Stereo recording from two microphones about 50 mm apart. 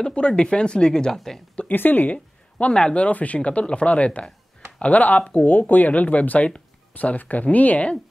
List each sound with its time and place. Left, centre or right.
0.0 s speech: centre
1.7 s speech: left
2.7 s speech: centre